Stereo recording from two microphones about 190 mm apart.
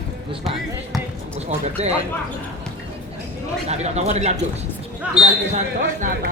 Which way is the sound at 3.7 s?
35° right (ahead or behind).